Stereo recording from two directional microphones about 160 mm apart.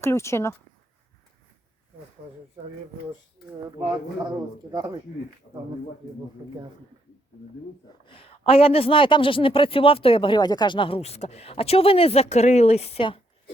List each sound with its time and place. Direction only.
0.0 s speech: 15° left (ahead or behind)
4.7 s speech: 25° right (ahead or behind)
6.4 s speech: 25° right (ahead or behind)
8.0 s speech: 35° left (ahead or behind)